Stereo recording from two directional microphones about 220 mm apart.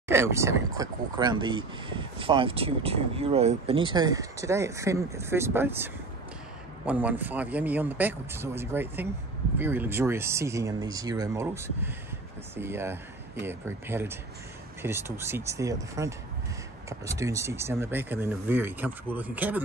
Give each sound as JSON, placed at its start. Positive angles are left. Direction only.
{"t": 0.1, "sound": "speech", "side_deg": -10}
{"t": 6.9, "sound": "speech", "side_deg": -5}